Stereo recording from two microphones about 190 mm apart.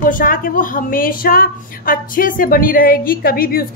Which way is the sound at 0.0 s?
45° left (ahead or behind).